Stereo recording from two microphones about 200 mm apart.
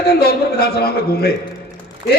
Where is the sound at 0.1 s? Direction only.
50° left (ahead or behind).